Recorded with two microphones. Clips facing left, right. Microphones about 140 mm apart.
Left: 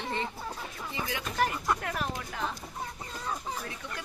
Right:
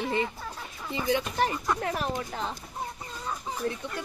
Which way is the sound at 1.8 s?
35° right (ahead or behind).